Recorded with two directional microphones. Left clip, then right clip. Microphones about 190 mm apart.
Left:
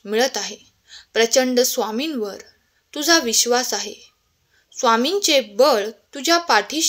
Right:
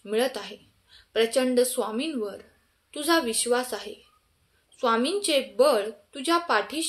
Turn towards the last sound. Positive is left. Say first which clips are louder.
# left 7 dB
turn(degrees=40)  # may be behind; listen again after turning